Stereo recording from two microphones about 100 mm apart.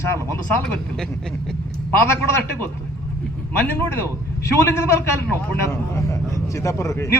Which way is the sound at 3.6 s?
25° left (ahead or behind).